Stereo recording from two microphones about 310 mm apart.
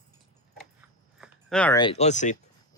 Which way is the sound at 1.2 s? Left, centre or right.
Centre.